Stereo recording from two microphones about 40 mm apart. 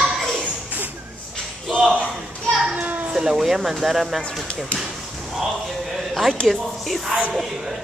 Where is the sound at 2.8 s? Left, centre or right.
Right.